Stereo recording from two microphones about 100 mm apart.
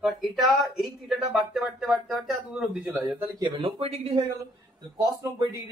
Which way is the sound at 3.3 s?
50° right (ahead or behind).